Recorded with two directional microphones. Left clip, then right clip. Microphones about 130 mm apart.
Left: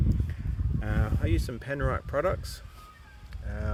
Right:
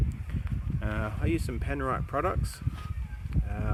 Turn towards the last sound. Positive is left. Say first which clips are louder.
# even
turn(degrees=-20)  # may be behind; listen again after turning